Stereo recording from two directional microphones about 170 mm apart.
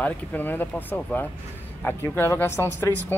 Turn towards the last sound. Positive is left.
turn(degrees=15)  # may be behind; listen again after turning